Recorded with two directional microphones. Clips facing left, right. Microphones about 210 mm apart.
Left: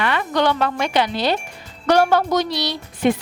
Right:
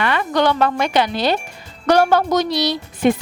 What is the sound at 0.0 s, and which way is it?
A woman's voice, 45° right (ahead or behind).